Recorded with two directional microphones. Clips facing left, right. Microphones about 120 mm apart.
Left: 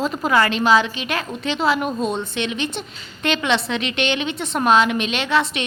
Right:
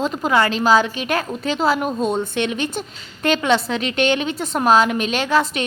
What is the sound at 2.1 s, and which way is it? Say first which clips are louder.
A woman's voice: right 3 dB; 50° right (ahead or behind).